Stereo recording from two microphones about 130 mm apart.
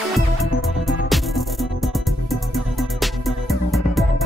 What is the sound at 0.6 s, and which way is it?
Music, centre (ahead or behind).